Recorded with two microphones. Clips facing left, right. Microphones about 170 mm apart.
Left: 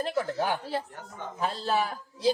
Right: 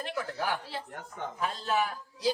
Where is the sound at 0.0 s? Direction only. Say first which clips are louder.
Left 5 dB; 30° left (ahead or behind).